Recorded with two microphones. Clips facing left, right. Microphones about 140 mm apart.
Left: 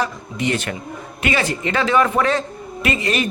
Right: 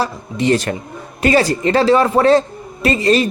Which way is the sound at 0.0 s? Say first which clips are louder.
Right 4 dB; 35° right (ahead or behind).